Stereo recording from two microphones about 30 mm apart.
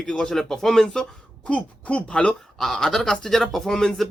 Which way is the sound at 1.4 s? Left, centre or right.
Left.